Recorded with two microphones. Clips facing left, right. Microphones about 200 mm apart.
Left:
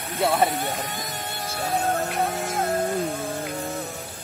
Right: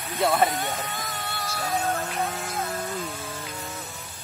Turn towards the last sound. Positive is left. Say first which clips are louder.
# left 7 dB
turn(degrees=50)  # may be behind; listen again after turning